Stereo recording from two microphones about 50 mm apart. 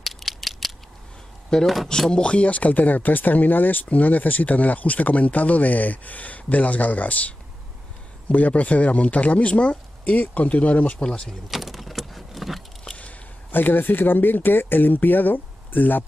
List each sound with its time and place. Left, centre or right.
0.0 s mechanisms: centre
1.5 s speech: centre; by 11.1 s left
11.1 s speech: centre
11.5 s vehicle: centre
13.5 s speech: left